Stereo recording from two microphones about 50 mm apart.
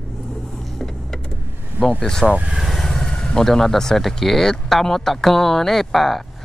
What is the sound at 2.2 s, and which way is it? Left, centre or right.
Speech, right.